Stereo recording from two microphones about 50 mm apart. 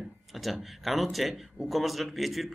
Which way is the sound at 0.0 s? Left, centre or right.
Centre.